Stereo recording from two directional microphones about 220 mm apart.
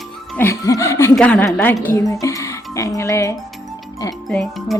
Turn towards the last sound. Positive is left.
turn(degrees=0)  # may be behind; listen again after turning